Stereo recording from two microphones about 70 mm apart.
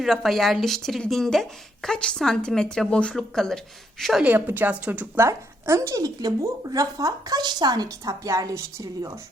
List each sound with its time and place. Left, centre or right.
0.0 s a woman's voice: centre
4.2 s a woman's voice: right
5.1 s speech: right
6.7 s speech: right